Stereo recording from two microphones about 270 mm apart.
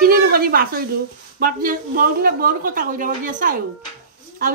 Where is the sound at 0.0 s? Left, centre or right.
Right.